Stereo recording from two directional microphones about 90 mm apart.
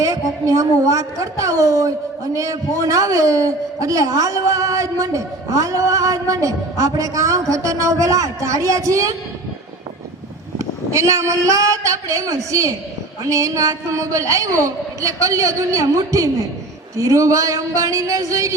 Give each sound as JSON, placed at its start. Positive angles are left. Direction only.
{"t": 0.0, "sound": "a man's voice", "side_deg": -35}
{"t": 10.6, "sound": "a man's voice", "side_deg": -35}